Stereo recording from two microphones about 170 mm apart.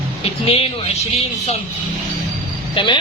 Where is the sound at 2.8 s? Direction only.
30° left (ahead or behind).